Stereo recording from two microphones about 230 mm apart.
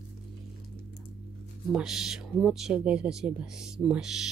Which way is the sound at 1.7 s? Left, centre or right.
Centre.